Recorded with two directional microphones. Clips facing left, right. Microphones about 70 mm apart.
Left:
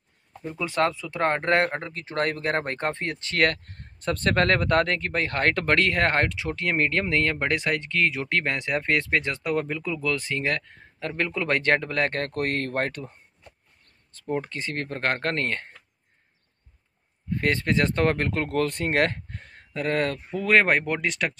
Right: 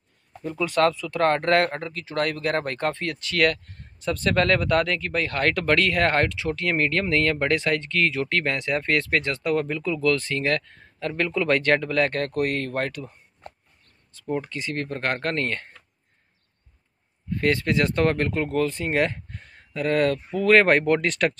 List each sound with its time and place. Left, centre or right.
0.4 s speech: left
13.4 s a sound: right
14.3 s speech: left
17.3 s speech: left
18.5 s speech: left
19.7 s speech: left
20.2 s speech: centre